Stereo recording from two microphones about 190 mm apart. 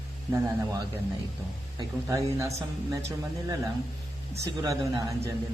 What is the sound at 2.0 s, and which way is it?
Speech, 15° right (ahead or behind).